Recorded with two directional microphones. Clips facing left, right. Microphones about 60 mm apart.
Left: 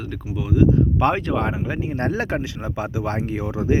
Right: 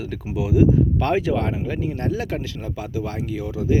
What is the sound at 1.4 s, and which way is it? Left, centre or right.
Speech, centre.